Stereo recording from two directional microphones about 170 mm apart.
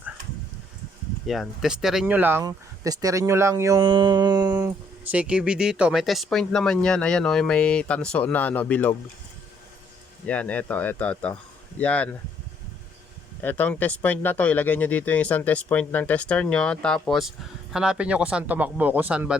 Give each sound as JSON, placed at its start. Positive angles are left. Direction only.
{"t": 1.3, "sound": "speech", "side_deg": 0}
{"t": 2.4, "sound": "speech", "side_deg": -20}
{"t": 5.0, "sound": "speech", "side_deg": -5}
{"t": 10.2, "sound": "speech", "side_deg": 10}
{"t": 13.4, "sound": "speech", "side_deg": 10}